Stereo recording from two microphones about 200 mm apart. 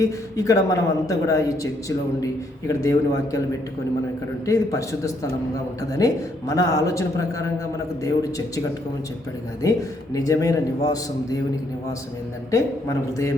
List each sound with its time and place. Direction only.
0.0 s speech: 15° left (ahead or behind)
4.4 s speech: 15° left (ahead or behind)
12.5 s speech: 15° left (ahead or behind)